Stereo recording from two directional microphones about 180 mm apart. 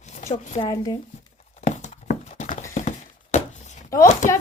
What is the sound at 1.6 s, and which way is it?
Horse, 45° left (ahead or behind).